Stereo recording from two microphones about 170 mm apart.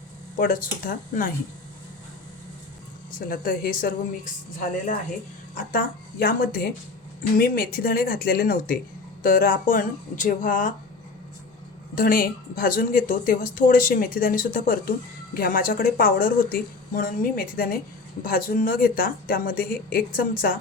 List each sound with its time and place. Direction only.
0.3 s speech: 55° left (ahead or behind)
3.1 s speech: 55° left (ahead or behind)
5.5 s speech: 60° left (ahead or behind)
11.9 s speech: 55° left (ahead or behind)